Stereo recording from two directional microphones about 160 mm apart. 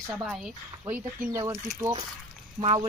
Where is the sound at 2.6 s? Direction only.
35° right (ahead or behind).